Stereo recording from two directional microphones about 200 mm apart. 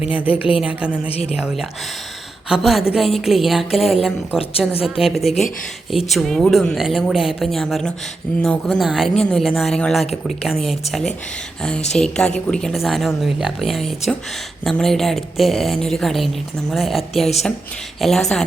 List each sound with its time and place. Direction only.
0.0 s a woman's voice: 5° right (ahead or behind)
1.0 s speech: 30° left (ahead or behind)
1.4 s speech: 5° right (ahead or behind)
11.9 s speech: 5° left (ahead or behind)